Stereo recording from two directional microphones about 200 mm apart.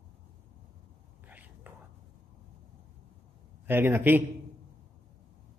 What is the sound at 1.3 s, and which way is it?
Whispering, 10° right (ahead or behind).